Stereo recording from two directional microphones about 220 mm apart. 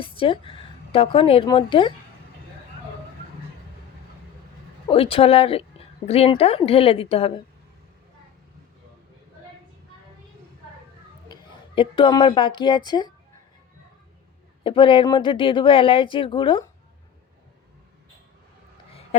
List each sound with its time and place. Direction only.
0.0 s a woman's voice: 25° left (ahead or behind)
4.9 s speech: 25° left (ahead or behind)
11.3 s a woman's voice: 20° left (ahead or behind)
14.6 s speech: 25° left (ahead or behind)